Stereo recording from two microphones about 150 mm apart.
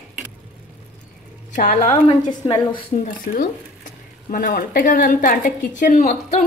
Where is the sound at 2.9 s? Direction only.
65° left (ahead or behind).